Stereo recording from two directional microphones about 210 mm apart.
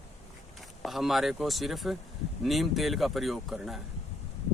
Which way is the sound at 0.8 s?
Centre (ahead or behind).